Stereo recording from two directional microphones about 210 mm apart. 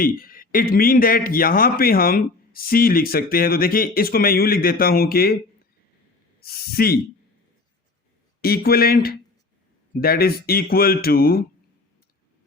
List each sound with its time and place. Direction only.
0.0 s a man's voice: 45° left (ahead or behind)
6.4 s speech: 45° left (ahead or behind)
8.4 s a man's voice: 45° left (ahead or behind)